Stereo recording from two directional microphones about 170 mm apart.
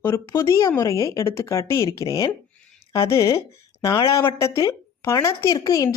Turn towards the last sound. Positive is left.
turn(degrees=20)  # may be behind; listen again after turning